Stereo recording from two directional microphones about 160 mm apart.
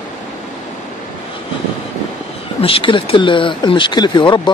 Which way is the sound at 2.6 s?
35° left (ahead or behind).